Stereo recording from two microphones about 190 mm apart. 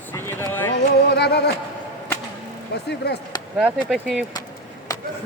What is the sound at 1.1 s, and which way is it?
Speech, 60° left (ahead or behind).